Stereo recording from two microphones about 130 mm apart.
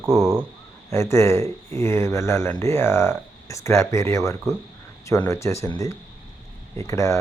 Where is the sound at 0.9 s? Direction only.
20° left (ahead or behind).